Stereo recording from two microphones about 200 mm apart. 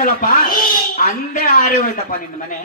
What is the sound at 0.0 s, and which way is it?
Speech, 40° left (ahead or behind).